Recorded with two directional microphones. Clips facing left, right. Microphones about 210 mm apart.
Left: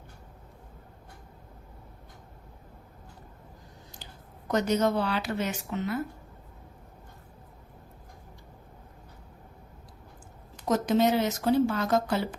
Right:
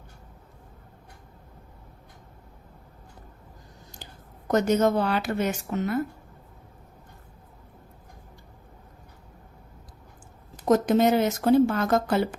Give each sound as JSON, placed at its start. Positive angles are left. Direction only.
{"t": 3.9, "sound": "speech", "side_deg": -50}
{"t": 10.7, "sound": "speech", "side_deg": -50}